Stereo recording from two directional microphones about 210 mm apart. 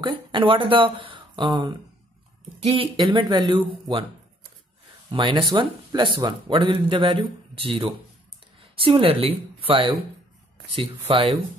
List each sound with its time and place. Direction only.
0.0 s speech: 20° right (ahead or behind)
5.1 s speech: 20° right (ahead or behind)
11.1 s speech: 25° right (ahead or behind)